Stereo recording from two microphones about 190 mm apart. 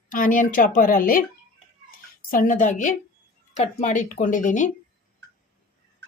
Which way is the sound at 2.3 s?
45° left (ahead or behind).